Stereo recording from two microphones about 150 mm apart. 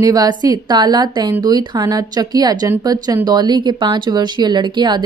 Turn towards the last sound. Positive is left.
turn(degrees=-30)  # may be behind; listen again after turning